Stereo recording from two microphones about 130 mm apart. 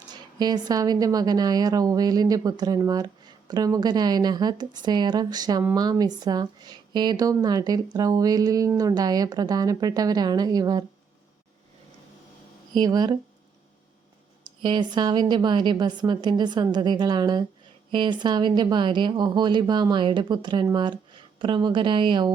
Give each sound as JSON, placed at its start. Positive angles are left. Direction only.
{"t": 0.1, "sound": "a woman's voice", "side_deg": -30}
{"t": 12.7, "sound": "a woman's voice", "side_deg": -30}
{"t": 14.4, "sound": "a woman's voice", "side_deg": -35}